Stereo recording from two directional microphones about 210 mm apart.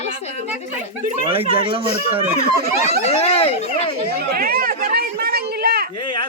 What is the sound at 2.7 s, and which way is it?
Speech, 30° left (ahead or behind).